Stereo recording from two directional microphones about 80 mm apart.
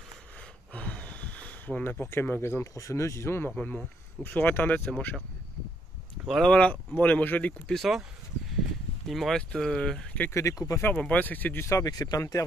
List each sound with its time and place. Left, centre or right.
0.4 s a sound: centre
2.0 s speech: left
2.6 s speech: left
3.4 s speech: centre
6.2 s speech: centre
6.5 s speech: centre
8.5 s a sound: centre
9.5 s speech: centre
10.3 s speech: left
10.8 s speech: centre
11.8 s speech: left